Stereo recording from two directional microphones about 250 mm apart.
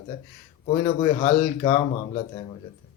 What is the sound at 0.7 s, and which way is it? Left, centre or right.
Speech, left.